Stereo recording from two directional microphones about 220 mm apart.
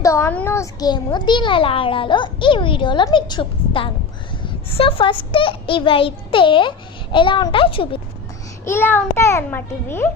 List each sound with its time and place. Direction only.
0.0 s a child's voice: 15° left (ahead or behind)
8.6 s a child's voice: 10° left (ahead or behind)